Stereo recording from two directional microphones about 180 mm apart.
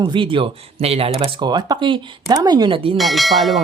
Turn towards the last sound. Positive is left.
turn(degrees=0)  # may be behind; listen again after turning